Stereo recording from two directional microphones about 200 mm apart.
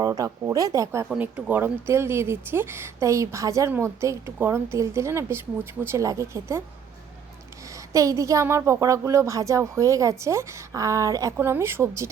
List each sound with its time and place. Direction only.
0.0 s speech: 15° right (ahead or behind)
7.9 s speech: 15° right (ahead or behind)